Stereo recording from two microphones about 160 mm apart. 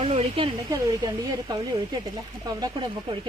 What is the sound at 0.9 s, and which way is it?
A woman's voice, 25° right (ahead or behind).